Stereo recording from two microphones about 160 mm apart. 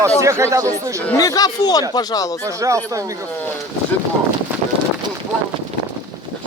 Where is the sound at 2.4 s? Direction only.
20° right (ahead or behind).